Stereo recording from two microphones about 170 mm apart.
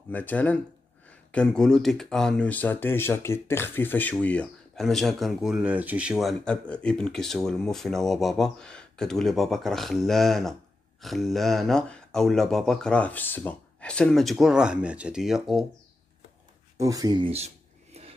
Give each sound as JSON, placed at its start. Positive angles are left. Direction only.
{"t": 0.1, "sound": "speech", "side_deg": 10}
{"t": 16.7, "sound": "speech", "side_deg": -20}
{"t": 17.9, "sound": "a sound", "side_deg": -40}